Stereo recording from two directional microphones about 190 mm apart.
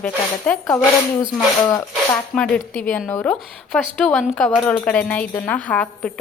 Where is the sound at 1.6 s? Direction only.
20° left (ahead or behind).